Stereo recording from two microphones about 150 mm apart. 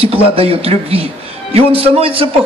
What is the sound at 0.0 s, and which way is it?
A man's voice, 40° right (ahead or behind).